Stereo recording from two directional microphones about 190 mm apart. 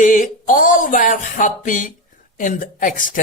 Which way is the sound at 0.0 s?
45° left (ahead or behind).